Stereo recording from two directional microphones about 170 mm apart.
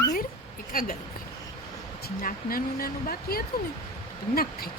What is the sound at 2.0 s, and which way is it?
Speech, 55° left (ahead or behind).